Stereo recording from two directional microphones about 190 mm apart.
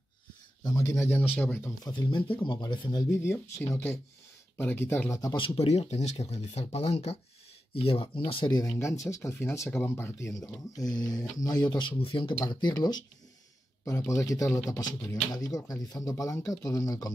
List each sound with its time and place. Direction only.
0.7 s speech: 20° left (ahead or behind)
1.9 s speech: 25° left (ahead or behind)